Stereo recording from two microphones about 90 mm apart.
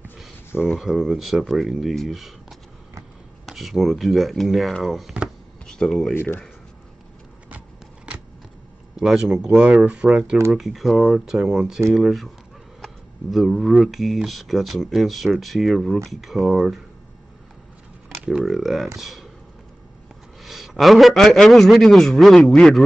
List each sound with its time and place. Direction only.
0.7 s speech: 5° right (ahead or behind)
3.4 s speech: centre (ahead or behind)
5.7 s speech: 5° left (ahead or behind)
6.1 s speech: 20° left (ahead or behind)
7.4 s a sound: 15° right (ahead or behind)
8.9 s speech: 5° right (ahead or behind)
18.2 s speech: 5° right (ahead or behind)
20.4 s speech: centre (ahead or behind)